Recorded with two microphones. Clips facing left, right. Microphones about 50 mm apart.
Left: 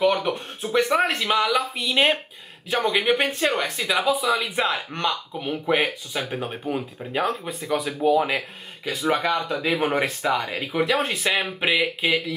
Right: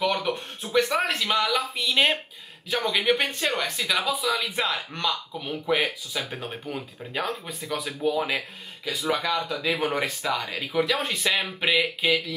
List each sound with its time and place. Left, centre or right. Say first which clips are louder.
0.0 s speech: left 4 dB; centre
9.1 s speech: left 3 dB; left; by 12.4 s centre